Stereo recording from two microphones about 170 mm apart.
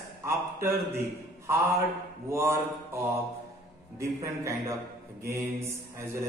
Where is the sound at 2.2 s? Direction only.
15° right (ahead or behind).